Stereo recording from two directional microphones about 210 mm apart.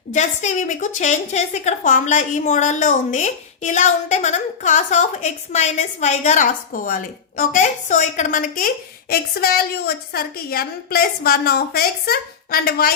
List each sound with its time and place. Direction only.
0.1 s a woman's voice: 35° left (ahead or behind)